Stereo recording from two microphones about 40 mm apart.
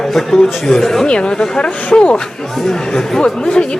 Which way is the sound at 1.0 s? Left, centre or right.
Left.